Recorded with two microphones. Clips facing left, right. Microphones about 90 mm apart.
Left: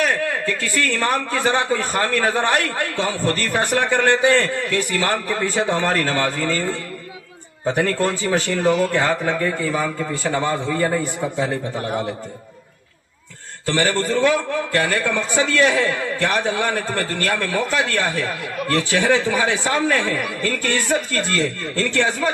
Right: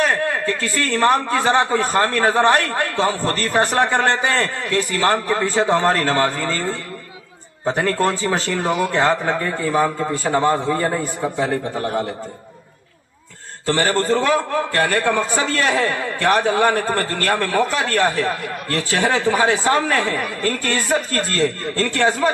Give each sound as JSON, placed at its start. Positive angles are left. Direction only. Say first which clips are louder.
{"t": 0.0, "sound": "a man's voice", "louder": "right 2 dB", "side_deg": -35}
{"t": 13.7, "sound": "a man's voice", "louder": "right 2 dB", "side_deg": -40}